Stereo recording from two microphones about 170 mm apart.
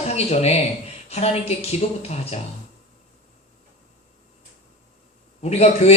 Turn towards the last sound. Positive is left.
turn(degrees=40)  # may be behind; listen again after turning